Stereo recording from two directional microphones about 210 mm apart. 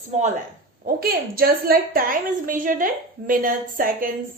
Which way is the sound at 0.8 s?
45° right (ahead or behind).